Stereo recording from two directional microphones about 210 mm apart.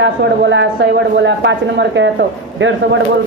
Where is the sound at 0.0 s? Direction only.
60° right (ahead or behind).